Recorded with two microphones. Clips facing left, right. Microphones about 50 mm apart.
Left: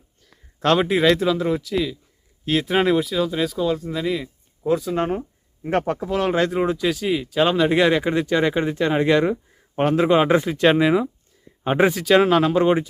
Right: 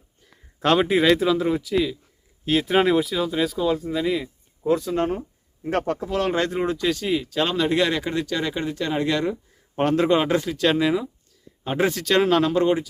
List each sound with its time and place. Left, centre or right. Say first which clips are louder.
0.6 s speech: left 1 dB; centre
4.9 s speech: left 1 dB; centre
9.7 s speech: left 2 dB; centre
10.2 s speech: left 4 dB; left
11.9 s speech: left 2 dB; centre
12.6 s speech: left 3 dB; left